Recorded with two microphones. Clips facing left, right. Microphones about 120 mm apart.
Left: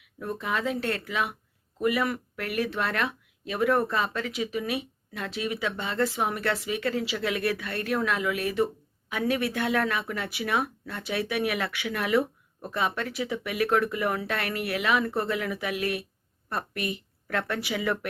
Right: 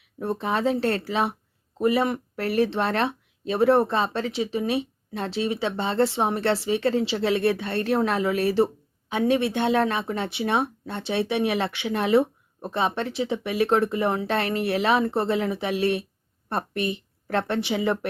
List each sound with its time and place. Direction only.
0.0 s a woman's voice: 30° right (ahead or behind)